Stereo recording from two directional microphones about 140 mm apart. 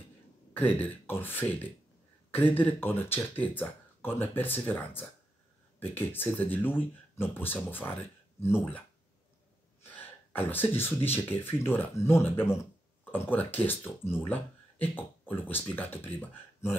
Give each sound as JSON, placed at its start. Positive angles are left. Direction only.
{"t": 0.6, "sound": "speech", "side_deg": 15}
{"t": 9.9, "sound": "speech", "side_deg": 15}